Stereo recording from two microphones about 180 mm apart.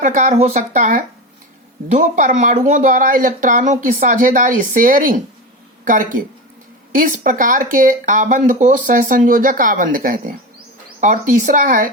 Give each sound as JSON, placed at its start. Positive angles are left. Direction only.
{"t": 0.0, "sound": "speech", "side_deg": -40}